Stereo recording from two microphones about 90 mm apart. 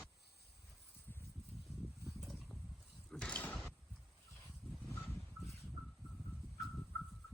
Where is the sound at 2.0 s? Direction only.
Centre (ahead or behind).